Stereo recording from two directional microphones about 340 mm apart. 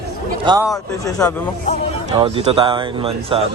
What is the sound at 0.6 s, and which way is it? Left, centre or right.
Speech, centre.